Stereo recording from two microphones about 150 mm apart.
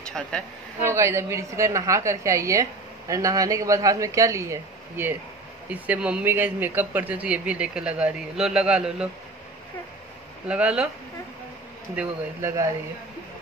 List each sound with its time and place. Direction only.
0.8 s a woman's voice: 20° right (ahead or behind)
10.5 s speech: 5° right (ahead or behind)
11.9 s speech: 15° right (ahead or behind)